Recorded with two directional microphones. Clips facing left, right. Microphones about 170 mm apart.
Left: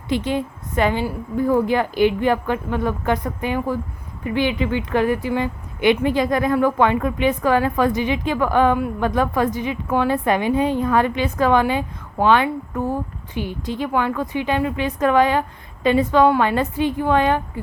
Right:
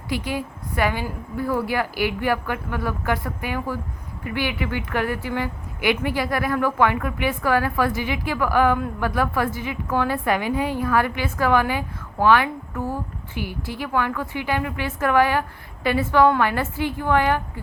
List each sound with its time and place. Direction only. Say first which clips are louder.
0.1 s a woman's voice: left 5 dB; 25° left (ahead or behind)